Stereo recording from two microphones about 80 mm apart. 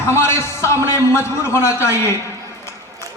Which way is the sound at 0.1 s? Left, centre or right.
Left.